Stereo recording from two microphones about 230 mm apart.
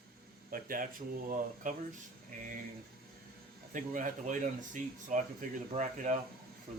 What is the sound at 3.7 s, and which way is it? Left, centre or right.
Speech, right.